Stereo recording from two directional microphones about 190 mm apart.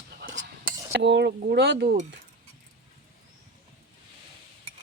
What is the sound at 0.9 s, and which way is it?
Speech, 65° right (ahead or behind).